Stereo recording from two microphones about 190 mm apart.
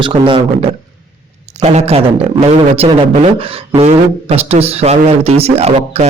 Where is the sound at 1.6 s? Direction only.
35° right (ahead or behind).